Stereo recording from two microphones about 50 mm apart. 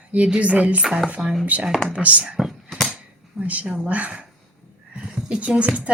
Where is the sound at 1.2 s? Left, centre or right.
Centre.